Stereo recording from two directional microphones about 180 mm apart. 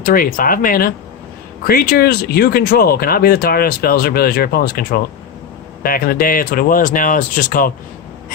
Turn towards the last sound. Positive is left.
turn(degrees=50)  # may be behind; listen again after turning